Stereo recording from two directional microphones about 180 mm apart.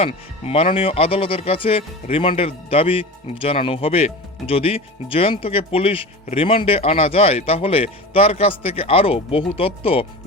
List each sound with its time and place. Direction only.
0.0 s speech: 30° left (ahead or behind)